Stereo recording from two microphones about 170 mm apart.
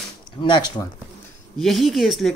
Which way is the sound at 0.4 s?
30° left (ahead or behind).